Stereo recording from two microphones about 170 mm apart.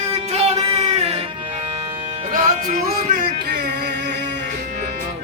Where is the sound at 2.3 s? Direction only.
55° right (ahead or behind).